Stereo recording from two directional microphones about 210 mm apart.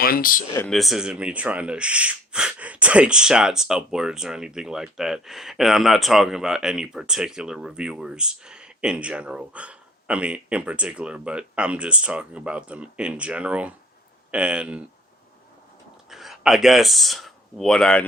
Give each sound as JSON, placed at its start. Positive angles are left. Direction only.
{"t": 0.0, "sound": "speech", "side_deg": 45}
{"t": 0.7, "sound": "speech", "side_deg": 0}
{"t": 16.0, "sound": "speech", "side_deg": 0}